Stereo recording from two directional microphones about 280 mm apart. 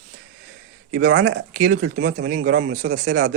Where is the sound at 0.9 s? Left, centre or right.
Right.